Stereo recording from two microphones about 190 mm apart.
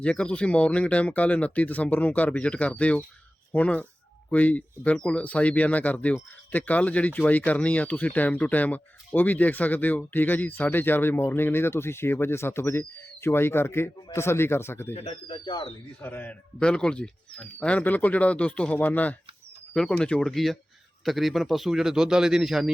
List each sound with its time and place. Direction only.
0.0 s speech: 5° left (ahead or behind)
14.9 s speech: 30° left (ahead or behind)
16.0 s a man's voice: 10° left (ahead or behind)